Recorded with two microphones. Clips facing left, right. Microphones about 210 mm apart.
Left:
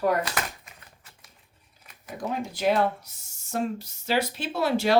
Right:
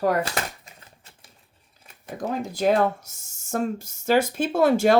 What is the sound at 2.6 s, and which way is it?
Speech, 45° right (ahead or behind).